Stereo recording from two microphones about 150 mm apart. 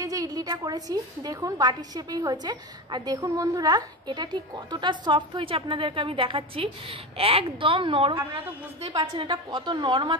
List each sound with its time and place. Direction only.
0.0 s a woman's voice: 25° right (ahead or behind)